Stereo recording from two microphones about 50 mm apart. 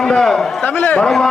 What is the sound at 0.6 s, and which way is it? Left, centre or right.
Speech, left.